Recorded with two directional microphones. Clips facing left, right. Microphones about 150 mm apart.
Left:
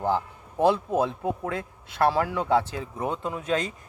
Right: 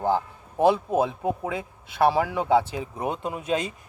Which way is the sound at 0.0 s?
10° right (ahead or behind).